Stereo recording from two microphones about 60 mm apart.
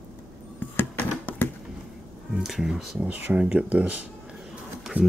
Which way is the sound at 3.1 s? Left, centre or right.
Right.